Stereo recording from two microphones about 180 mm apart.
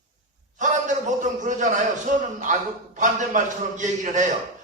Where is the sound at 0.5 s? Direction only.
45° right (ahead or behind).